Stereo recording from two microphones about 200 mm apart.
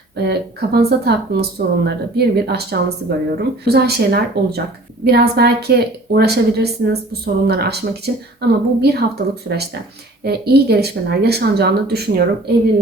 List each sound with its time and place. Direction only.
0.3 s a woman's voice: 50° right (ahead or behind)